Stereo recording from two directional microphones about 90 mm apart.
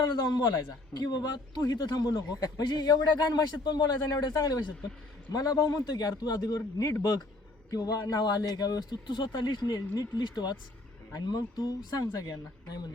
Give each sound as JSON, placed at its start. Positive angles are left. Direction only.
{"t": 0.9, "sound": "a man's voice", "side_deg": 50}
{"t": 9.0, "sound": "a man's voice", "side_deg": 60}